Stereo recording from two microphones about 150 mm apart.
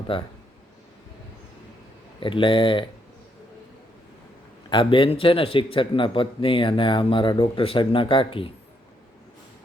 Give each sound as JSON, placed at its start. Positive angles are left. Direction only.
{"t": 0.1, "sound": "speech", "side_deg": 35}
{"t": 2.2, "sound": "speech", "side_deg": 35}
{"t": 4.7, "sound": "speech", "side_deg": 35}